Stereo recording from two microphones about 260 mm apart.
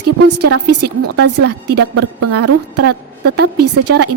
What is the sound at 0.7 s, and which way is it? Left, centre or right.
A woman's voice, right.